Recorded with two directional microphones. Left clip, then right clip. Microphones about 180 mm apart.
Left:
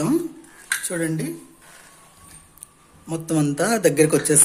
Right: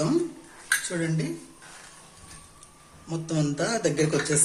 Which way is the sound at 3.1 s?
60° left (ahead or behind).